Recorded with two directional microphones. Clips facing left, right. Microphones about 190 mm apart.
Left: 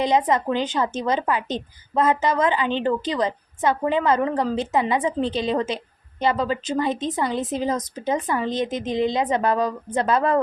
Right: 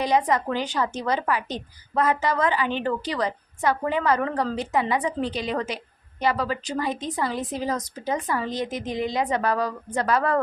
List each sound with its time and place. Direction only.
0.0 s a woman's voice: 20° left (ahead or behind)